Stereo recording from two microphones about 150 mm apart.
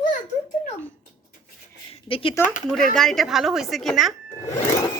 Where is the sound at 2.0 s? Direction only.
35° left (ahead or behind).